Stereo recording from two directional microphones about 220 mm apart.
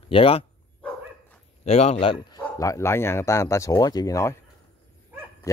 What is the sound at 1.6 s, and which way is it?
Speech, 30° left (ahead or behind).